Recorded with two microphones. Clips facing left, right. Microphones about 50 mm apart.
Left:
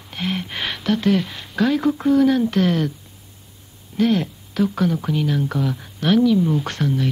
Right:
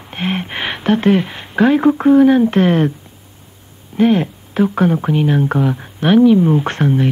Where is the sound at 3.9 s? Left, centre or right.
Right.